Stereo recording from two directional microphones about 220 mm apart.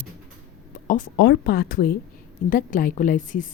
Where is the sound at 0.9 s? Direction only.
40° left (ahead or behind).